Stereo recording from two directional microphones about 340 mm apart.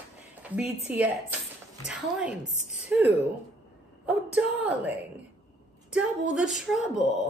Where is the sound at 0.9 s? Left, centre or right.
Centre.